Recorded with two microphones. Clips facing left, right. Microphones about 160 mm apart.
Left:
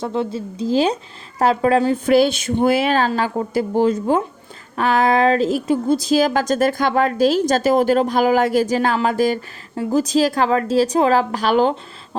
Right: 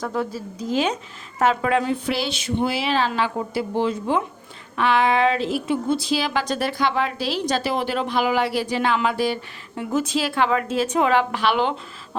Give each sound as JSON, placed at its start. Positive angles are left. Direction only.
{"t": 0.0, "sound": "a woman's voice", "side_deg": 25}